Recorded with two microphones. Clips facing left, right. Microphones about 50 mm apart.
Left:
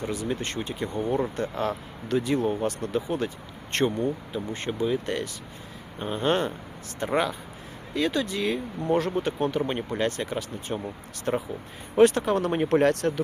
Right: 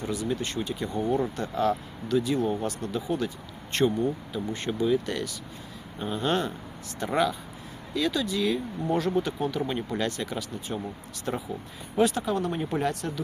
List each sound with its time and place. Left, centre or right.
0.0 s speech: left
11.9 s speech: left